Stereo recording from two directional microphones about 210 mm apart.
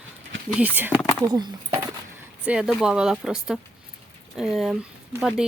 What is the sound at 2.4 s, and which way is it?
Speech, 5° right (ahead or behind).